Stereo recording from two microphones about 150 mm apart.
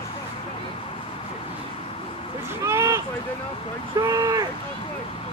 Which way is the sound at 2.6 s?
20° right (ahead or behind).